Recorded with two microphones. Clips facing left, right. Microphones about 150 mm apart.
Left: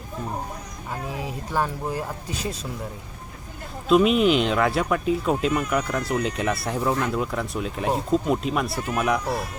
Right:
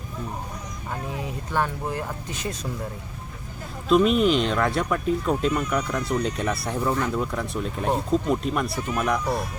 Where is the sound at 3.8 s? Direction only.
5° left (ahead or behind).